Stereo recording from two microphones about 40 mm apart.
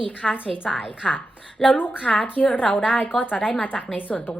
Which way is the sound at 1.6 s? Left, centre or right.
Left.